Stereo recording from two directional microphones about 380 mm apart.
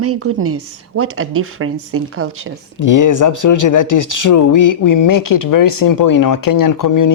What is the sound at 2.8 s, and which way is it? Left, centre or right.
Speech, left.